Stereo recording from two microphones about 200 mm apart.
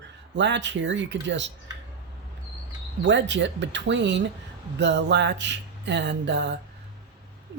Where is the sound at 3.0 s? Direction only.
65° right (ahead or behind).